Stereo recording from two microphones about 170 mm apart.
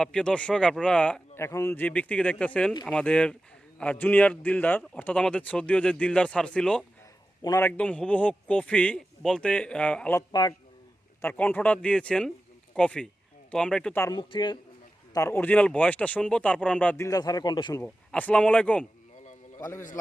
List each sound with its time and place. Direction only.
0.0 s a man's voice: 5° left (ahead or behind)
7.4 s speech: 20° left (ahead or behind)
7.7 s a man's voice: 10° left (ahead or behind)
14.0 s speech: 25° left (ahead or behind)
15.1 s a man's voice: 15° left (ahead or behind)
17.1 s speech: 20° left (ahead or behind)
17.8 s a man's voice: 10° left (ahead or behind)
19.5 s a man's voice: 20° left (ahead or behind)